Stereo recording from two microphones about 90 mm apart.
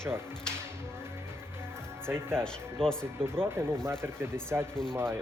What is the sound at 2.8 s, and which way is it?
Speech, 90° right.